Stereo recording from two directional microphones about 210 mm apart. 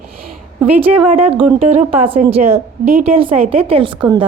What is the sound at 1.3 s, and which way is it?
A woman's voice, 30° right (ahead or behind).